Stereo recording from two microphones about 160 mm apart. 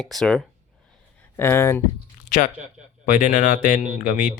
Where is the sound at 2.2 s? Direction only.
50° left (ahead or behind).